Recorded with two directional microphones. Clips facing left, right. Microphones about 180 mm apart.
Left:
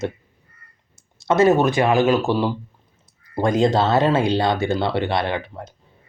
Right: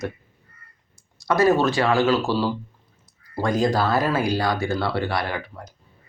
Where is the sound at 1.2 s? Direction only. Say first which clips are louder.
Left 3 dB; 25° left (ahead or behind).